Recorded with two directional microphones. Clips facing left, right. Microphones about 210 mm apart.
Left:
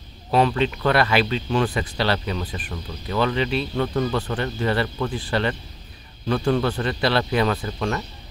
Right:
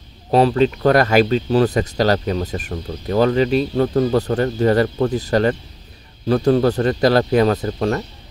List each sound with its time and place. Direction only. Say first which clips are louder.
0.3 s speech: right 5 dB; 35° right (ahead or behind)